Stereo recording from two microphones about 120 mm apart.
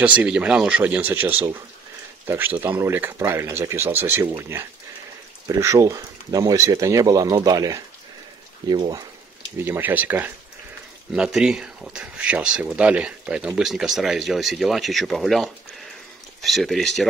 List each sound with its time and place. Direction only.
0.0 s speech: 10° right (ahead or behind); by 9.0 s 35° right (ahead or behind)
9.7 s speech: 15° right (ahead or behind); by 17.1 s centre (ahead or behind)